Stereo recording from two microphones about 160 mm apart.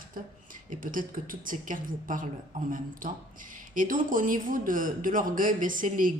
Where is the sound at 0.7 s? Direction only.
60° right (ahead or behind).